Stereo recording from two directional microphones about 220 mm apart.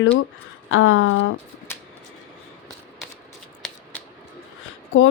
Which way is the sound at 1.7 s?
10° left (ahead or behind).